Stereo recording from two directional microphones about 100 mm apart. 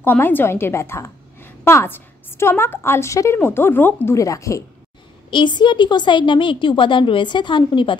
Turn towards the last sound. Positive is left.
turn(degrees=55)  # may be behind; listen again after turning